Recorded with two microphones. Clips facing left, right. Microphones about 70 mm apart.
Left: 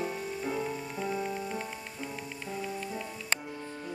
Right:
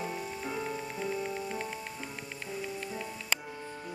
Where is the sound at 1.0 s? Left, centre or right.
Left.